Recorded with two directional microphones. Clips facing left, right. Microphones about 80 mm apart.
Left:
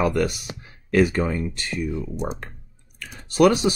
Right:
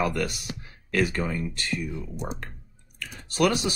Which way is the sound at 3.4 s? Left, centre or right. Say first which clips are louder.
Left 7 dB; left.